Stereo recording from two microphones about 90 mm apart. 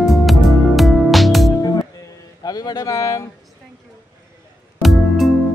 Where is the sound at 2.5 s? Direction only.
45° left (ahead or behind).